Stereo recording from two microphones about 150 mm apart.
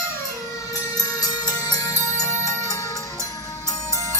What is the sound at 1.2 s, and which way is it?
Music, 25° left (ahead or behind).